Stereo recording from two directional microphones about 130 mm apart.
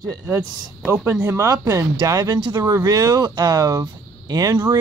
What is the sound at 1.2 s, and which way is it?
Speech, 20° right (ahead or behind).